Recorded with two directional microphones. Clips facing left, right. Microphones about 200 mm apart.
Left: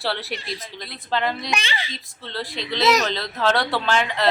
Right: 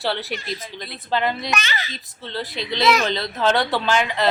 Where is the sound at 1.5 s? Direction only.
30° left (ahead or behind).